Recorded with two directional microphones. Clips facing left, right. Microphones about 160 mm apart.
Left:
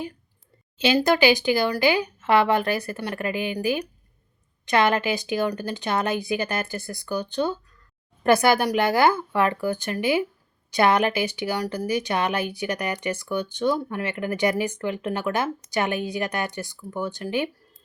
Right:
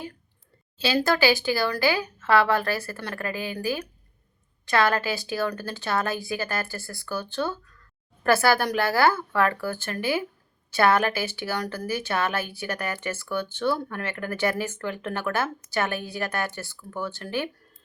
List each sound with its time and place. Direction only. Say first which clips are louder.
0.8 s a woman's voice: left 3 dB; 20° left (ahead or behind)